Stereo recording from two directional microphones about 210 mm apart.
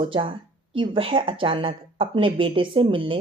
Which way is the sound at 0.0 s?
25° right (ahead or behind).